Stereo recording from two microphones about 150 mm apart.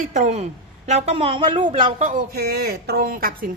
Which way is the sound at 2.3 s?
90° right.